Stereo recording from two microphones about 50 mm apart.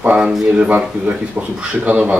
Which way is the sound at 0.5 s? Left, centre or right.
Right.